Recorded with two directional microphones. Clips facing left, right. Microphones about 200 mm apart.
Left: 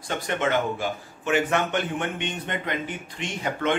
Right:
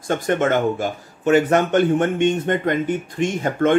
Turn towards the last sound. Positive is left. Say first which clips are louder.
# right 8 dB
turn(degrees=-45)  # may be behind; listen again after turning